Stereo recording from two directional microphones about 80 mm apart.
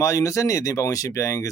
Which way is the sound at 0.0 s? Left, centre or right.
Left.